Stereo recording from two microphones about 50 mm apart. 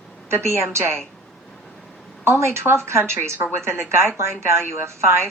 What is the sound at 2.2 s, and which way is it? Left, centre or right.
A woman's voice, right.